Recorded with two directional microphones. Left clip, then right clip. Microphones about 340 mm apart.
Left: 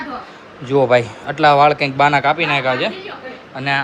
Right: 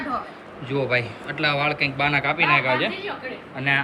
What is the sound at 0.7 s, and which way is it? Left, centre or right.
A man's voice, centre.